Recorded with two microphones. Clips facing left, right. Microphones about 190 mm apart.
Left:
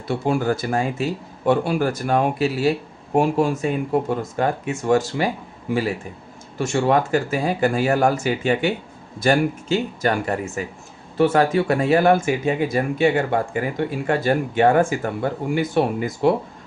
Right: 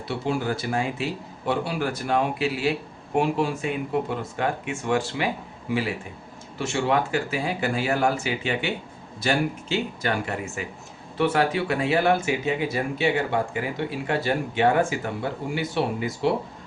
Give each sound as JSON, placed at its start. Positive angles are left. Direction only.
{"t": 0.1, "sound": "speech", "side_deg": 50}